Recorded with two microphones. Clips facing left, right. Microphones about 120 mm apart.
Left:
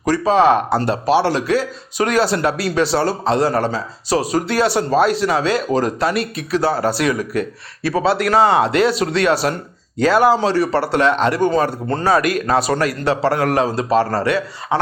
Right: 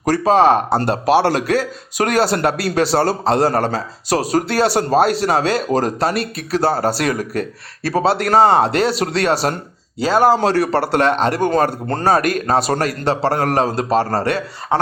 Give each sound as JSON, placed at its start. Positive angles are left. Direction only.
{"t": 0.0, "sound": "speech", "side_deg": -50}
{"t": 10.3, "sound": "speech", "side_deg": -50}